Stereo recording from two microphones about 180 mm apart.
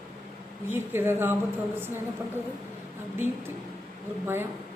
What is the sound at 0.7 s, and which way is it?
A woman's voice, 10° right (ahead or behind).